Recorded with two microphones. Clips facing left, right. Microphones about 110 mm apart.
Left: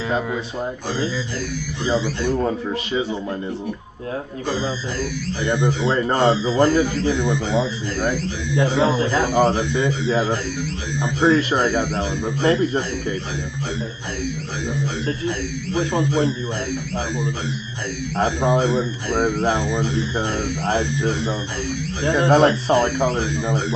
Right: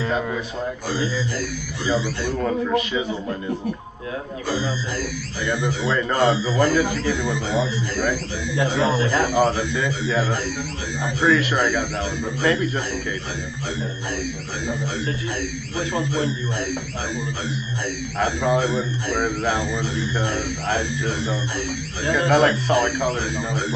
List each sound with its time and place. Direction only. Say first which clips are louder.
1.9 s speech: left 2 dB; 20° left (ahead or behind)
5.4 s speech: left 3 dB; 25° left (ahead or behind)
15.7 s speech: left 5 dB; 25° left (ahead or behind)
18.1 s speech: left 2 dB; 30° left (ahead or behind)